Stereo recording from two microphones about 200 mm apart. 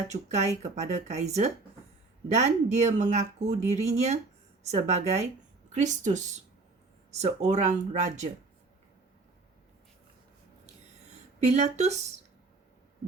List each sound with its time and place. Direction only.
0.1 s speech: 35° right (ahead or behind)
11.3 s speech: 35° right (ahead or behind)